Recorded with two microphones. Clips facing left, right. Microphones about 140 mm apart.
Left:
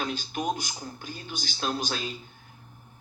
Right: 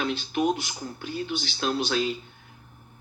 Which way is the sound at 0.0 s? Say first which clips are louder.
Right 5 dB; 40° left (ahead or behind).